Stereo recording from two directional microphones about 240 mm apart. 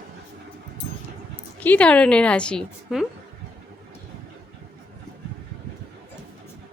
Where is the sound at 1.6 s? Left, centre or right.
Centre.